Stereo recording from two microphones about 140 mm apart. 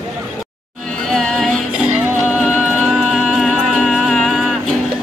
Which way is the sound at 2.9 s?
Centre (ahead or behind).